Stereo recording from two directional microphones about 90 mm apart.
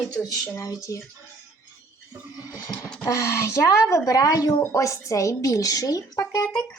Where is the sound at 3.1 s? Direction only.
35° left (ahead or behind).